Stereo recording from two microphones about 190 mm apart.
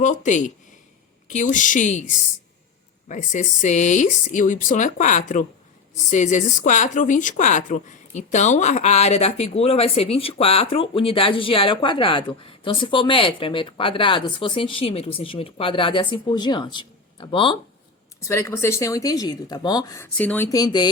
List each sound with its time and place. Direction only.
0.0 s a woman's voice: 40° left (ahead or behind)
18.2 s speech: 15° left (ahead or behind)